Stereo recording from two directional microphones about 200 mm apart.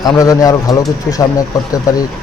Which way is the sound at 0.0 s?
20° left (ahead or behind).